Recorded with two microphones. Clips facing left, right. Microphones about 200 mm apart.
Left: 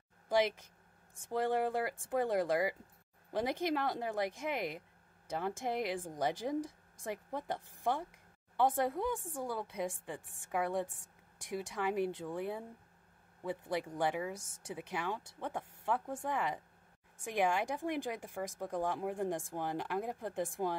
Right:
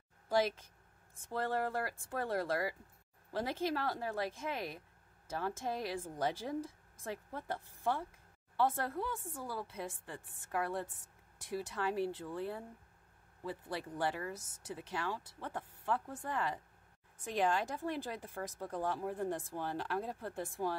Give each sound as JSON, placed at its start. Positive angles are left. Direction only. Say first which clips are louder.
{"t": 0.3, "sound": "speech", "louder": "left 1 dB", "side_deg": 15}